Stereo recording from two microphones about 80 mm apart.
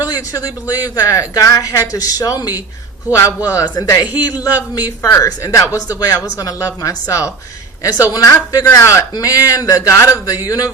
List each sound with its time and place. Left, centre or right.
0.0 s speech: left
5.0 s speech: left